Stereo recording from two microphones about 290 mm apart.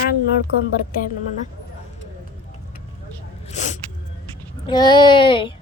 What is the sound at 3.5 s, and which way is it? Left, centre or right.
Vehicle, left.